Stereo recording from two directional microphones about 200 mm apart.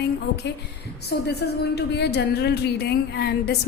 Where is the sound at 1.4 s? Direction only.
55° left (ahead or behind).